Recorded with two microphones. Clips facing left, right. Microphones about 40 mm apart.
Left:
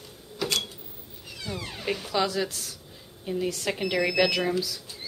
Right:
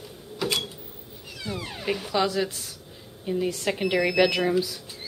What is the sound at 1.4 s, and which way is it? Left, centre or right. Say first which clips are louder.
Speech: right 2 dB; centre.